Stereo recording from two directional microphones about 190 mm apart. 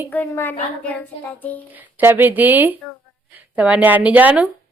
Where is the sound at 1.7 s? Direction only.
10° right (ahead or behind).